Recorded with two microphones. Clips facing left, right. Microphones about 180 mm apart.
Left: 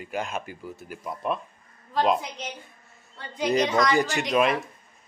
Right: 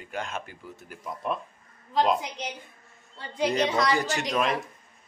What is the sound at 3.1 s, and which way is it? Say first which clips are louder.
Speech: right 1 dB; 30° right (ahead or behind).